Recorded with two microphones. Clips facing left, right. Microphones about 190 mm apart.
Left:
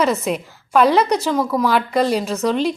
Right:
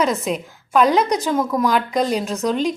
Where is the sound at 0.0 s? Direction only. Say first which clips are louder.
Left 1 dB; 5° left (ahead or behind).